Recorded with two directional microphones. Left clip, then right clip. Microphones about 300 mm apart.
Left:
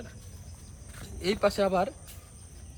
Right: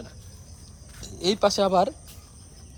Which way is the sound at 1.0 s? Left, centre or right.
Centre.